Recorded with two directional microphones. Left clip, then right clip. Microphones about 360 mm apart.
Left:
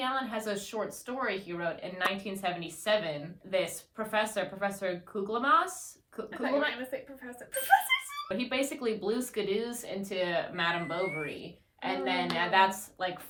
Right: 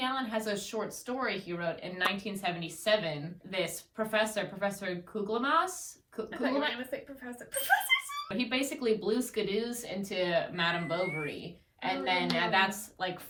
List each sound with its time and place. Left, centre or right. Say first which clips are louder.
0.0 s speech: even; centre